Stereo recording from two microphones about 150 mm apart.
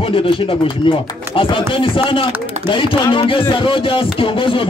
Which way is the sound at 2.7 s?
35° left (ahead or behind).